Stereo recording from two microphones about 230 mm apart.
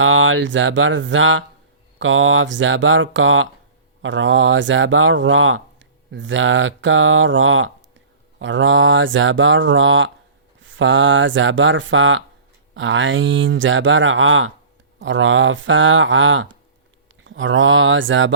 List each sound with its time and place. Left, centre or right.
0.0 s speech: right